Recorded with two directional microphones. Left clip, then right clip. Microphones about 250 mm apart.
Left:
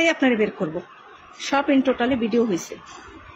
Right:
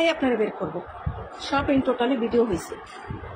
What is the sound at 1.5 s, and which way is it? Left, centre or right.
Speech, left.